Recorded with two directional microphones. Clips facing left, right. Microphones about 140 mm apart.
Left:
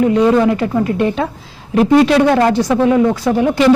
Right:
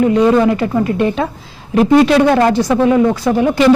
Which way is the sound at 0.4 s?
25° right (ahead or behind).